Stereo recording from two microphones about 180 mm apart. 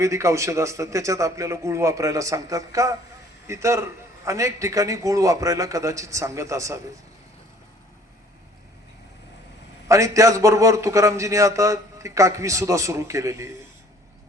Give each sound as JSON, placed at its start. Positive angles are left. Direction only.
{"t": 0.0, "sound": "a man's voice", "side_deg": -15}
{"t": 9.9, "sound": "a man's voice", "side_deg": -15}